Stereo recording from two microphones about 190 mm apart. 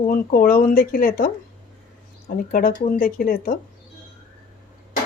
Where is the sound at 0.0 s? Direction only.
50° left (ahead or behind).